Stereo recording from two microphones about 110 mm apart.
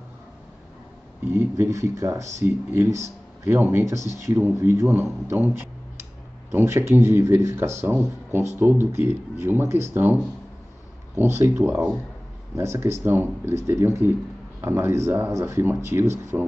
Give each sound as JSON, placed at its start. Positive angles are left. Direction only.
{"t": 1.3, "sound": "speech", "side_deg": -25}
{"t": 11.1, "sound": "speech", "side_deg": -25}